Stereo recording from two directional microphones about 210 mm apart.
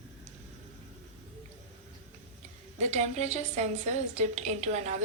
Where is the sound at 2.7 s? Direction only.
35° right (ahead or behind).